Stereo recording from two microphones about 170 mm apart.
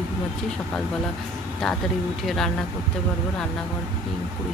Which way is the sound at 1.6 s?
Centre (ahead or behind).